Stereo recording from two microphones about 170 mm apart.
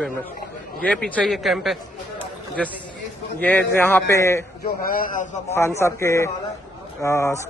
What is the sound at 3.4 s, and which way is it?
Speech, 10° left (ahead or behind).